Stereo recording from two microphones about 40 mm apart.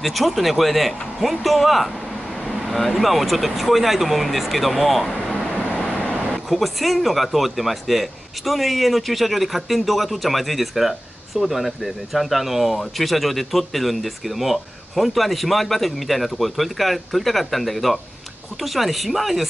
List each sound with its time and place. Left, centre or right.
0.0 s speech: centre
6.3 s speech: centre